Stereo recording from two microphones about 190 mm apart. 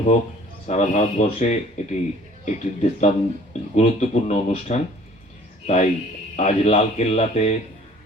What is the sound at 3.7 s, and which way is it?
Speech, 35° left (ahead or behind).